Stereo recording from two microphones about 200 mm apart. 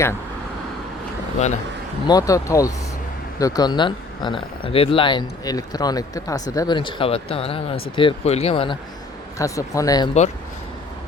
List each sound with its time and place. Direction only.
2.0 s speech: 15° left (ahead or behind)